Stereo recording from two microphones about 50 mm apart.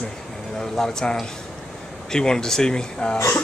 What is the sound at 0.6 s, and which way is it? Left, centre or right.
Speech, centre.